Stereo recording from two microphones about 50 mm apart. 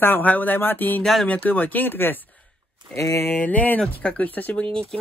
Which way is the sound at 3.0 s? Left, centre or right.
Left.